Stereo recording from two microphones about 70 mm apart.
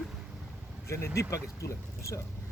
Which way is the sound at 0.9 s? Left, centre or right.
Left.